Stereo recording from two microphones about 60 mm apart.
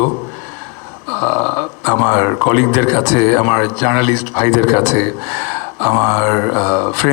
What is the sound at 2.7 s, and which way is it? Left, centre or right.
A man's voice, centre.